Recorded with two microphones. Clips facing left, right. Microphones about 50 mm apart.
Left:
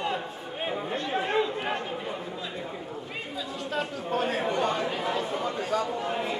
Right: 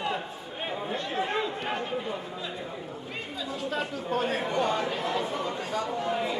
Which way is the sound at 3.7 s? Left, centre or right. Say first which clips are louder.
Left 2 dB; centre.